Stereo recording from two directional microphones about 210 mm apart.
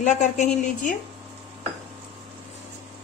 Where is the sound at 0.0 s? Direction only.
35° left (ahead or behind).